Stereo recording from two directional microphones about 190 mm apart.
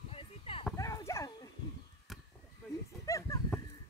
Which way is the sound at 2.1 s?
Centre (ahead or behind).